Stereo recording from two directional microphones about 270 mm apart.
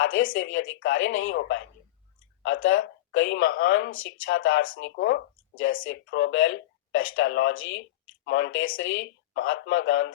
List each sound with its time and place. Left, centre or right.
0.0 s speech: left